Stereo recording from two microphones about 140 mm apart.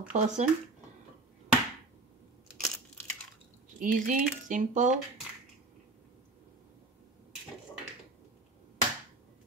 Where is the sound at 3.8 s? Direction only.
65° right (ahead or behind).